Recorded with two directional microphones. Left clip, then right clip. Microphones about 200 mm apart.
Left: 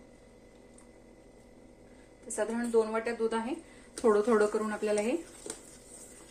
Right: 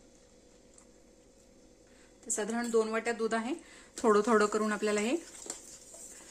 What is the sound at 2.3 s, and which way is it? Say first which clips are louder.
A woman's voice: left 2 dB; 60° right (ahead or behind).